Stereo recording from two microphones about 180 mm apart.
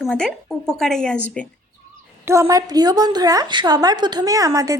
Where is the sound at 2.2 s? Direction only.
15° right (ahead or behind).